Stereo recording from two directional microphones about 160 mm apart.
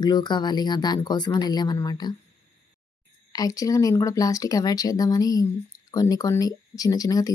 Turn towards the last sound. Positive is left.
turn(degrees=20)  # may be behind; listen again after turning